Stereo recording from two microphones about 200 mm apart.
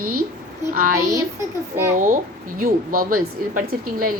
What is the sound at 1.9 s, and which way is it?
A woman's voice, 45° right (ahead or behind).